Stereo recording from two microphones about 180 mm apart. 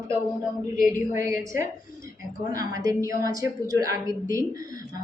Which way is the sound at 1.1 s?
15° right (ahead or behind).